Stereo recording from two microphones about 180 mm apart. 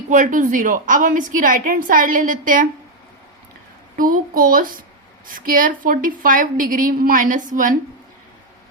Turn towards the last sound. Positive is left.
turn(degrees=-45)  # may be behind; listen again after turning